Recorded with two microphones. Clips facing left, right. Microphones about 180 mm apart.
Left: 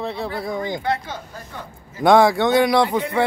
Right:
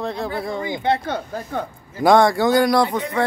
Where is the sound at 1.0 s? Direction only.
60° right (ahead or behind).